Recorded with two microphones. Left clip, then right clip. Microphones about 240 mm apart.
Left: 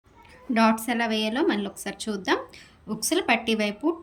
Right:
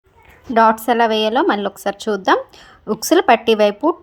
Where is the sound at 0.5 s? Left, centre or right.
Centre.